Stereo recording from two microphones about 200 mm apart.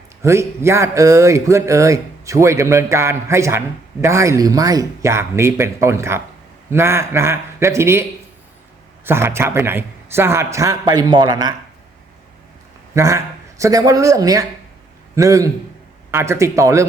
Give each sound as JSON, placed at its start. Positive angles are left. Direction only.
{"t": 0.2, "sound": "speech", "side_deg": -15}
{"t": 9.0, "sound": "speech", "side_deg": -10}
{"t": 12.9, "sound": "a man's voice", "side_deg": -15}